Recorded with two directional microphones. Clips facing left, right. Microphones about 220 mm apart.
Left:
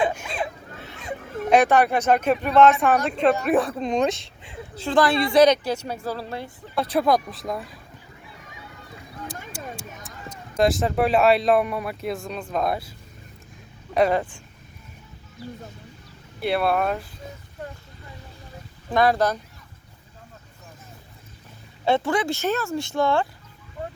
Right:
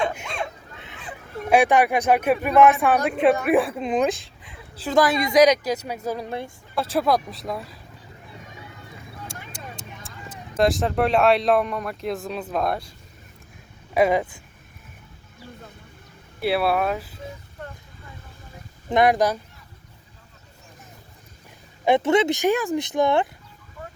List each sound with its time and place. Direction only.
1.5 s speech: 10° right (ahead or behind)
6.9 s speech: centre (ahead or behind)
10.6 s speech: centre (ahead or behind)
13.9 s speech: 10° right (ahead or behind)
16.4 s speech: 5° right (ahead or behind)
18.9 s speech: 20° right (ahead or behind)
21.8 s speech: 20° right (ahead or behind)